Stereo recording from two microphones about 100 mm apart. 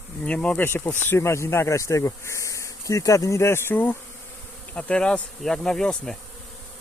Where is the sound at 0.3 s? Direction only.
10° left (ahead or behind).